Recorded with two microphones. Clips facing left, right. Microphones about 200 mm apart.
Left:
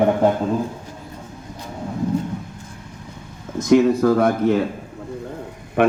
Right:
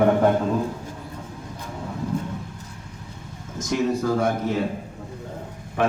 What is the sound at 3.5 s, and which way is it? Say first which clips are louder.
A man's voice: left 9 dB; 60° left (ahead or behind).